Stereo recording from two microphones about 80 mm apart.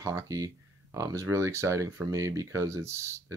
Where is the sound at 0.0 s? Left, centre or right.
Right.